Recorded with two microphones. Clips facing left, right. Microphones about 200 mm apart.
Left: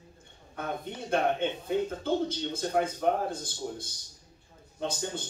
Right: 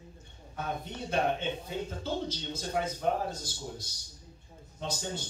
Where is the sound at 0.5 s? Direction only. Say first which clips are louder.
Left 1 dB; 55° left (ahead or behind).